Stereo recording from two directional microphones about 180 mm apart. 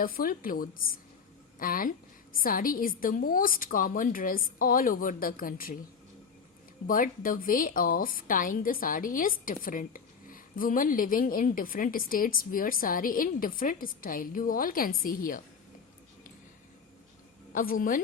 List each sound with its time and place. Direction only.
0.0 s a woman's voice: 50° left (ahead or behind)
6.8 s a woman's voice: 50° left (ahead or behind)
17.5 s a woman's voice: 50° left (ahead or behind)